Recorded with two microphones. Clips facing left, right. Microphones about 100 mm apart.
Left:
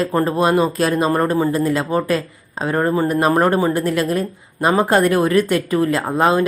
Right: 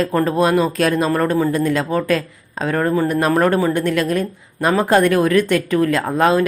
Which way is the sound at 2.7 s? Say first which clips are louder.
Even; 20° left (ahead or behind).